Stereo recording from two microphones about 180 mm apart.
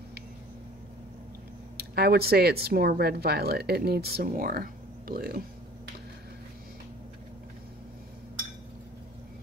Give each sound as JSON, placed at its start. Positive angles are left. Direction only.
{"t": 1.8, "sound": "speech", "side_deg": -60}